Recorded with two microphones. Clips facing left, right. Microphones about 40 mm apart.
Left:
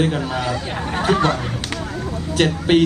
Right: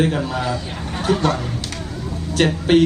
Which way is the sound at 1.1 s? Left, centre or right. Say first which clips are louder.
Left 1 dB; left.